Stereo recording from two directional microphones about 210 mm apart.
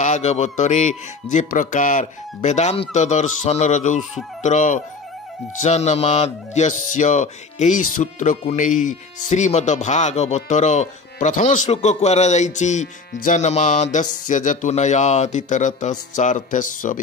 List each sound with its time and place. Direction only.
0.0 s speech: 35° left (ahead or behind)